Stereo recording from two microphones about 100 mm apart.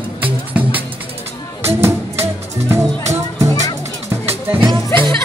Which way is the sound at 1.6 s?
25° right (ahead or behind).